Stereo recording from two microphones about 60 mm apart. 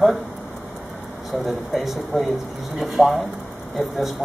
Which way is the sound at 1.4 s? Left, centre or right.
Centre.